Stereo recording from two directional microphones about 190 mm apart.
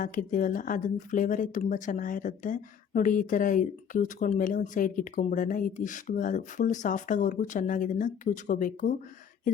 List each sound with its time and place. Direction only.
0.0 s speech: 45° left (ahead or behind)